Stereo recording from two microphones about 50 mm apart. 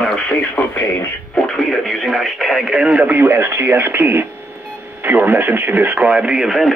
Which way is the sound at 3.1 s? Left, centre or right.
Right.